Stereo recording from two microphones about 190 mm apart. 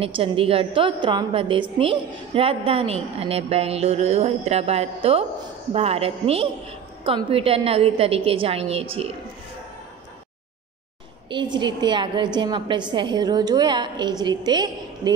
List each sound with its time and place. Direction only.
0.0 s a woman's voice: 30° right (ahead or behind)
11.2 s a woman's voice: 25° right (ahead or behind)